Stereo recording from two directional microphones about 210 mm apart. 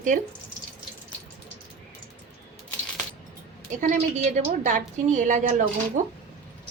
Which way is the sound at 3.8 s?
40° right (ahead or behind).